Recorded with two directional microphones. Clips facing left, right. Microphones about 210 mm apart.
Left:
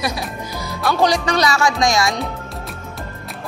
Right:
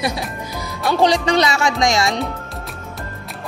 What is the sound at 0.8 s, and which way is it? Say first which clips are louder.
Speech: right 1 dB; 25° right (ahead or behind).